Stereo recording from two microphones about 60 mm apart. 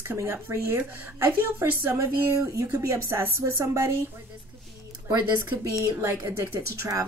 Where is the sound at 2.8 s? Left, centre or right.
Right.